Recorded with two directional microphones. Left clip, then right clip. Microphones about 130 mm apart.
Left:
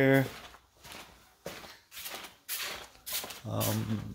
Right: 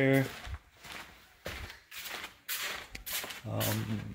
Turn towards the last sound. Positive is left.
turn(degrees=15)  # may be behind; listen again after turning